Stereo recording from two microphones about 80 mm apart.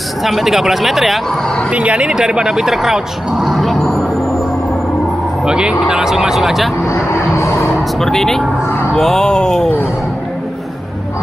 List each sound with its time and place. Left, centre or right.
0.2 s speech: centre
1.7 s speech: centre
5.4 s speech: centre
6.8 s a sound: left
8.0 s speech: centre